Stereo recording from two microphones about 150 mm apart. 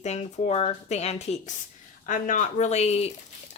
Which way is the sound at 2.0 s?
55° left (ahead or behind).